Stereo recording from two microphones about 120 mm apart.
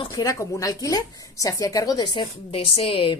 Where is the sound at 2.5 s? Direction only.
50° left (ahead or behind).